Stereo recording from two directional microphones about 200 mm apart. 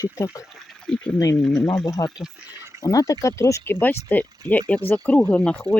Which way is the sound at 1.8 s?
15° left (ahead or behind).